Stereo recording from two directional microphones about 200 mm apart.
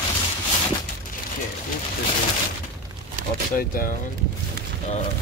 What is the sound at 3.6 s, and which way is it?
Speech, 45° left (ahead or behind).